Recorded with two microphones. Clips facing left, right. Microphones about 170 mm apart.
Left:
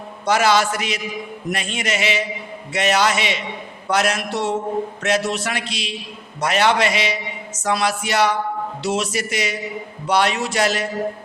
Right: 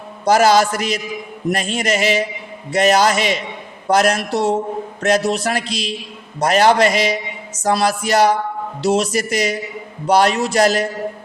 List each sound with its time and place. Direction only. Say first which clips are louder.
0.3 s a man's voice: right 4 dB; 40° right (ahead or behind)